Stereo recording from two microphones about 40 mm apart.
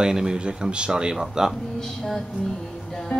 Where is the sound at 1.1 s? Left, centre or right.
Centre.